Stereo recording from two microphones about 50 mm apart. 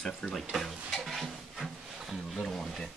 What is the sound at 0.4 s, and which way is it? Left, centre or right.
Stir, centre.